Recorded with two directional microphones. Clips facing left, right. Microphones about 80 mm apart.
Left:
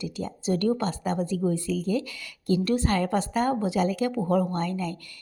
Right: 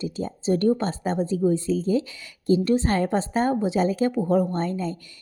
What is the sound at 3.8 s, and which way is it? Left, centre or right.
Speech, right.